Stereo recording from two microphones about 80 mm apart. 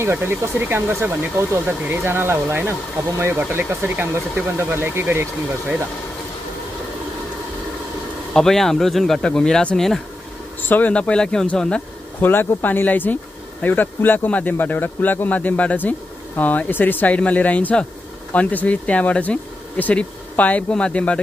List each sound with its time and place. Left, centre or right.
0.0 s speech: right
8.3 s speech: centre
10.7 s speech: centre
12.2 s speech: left